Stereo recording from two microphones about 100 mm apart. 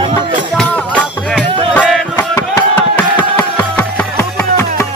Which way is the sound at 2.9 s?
15° left (ahead or behind).